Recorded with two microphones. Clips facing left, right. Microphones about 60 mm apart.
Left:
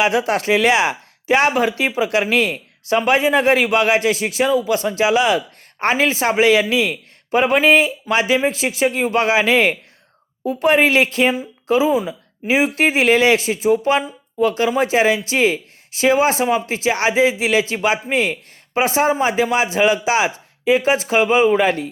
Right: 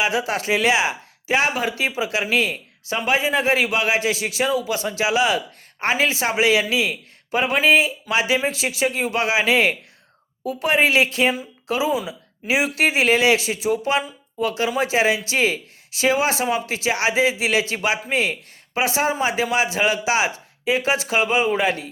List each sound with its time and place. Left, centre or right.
0.0 s speech: left